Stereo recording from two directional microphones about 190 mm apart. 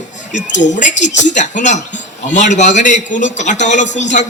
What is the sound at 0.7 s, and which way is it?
Speech, 40° left (ahead or behind).